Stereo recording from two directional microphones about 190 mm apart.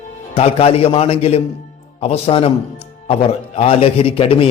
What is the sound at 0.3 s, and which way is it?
A man's voice, 30° left (ahead or behind).